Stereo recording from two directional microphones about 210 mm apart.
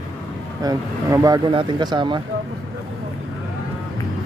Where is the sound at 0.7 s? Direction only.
15° right (ahead or behind).